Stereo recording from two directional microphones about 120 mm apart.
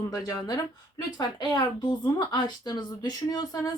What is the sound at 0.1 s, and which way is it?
A woman's voice, 30° left (ahead or behind).